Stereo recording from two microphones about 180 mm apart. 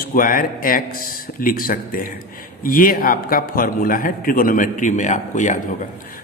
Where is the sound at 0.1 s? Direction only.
50° left (ahead or behind).